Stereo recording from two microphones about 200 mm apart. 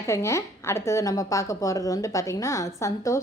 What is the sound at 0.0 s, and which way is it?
Speech, 15° left (ahead or behind).